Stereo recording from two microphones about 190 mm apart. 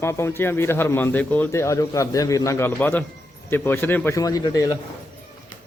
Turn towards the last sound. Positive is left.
turn(degrees=20)  # may be behind; listen again after turning